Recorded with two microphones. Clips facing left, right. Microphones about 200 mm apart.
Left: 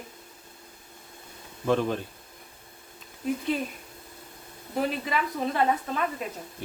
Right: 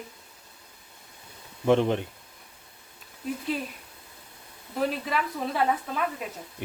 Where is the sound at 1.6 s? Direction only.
20° right (ahead or behind).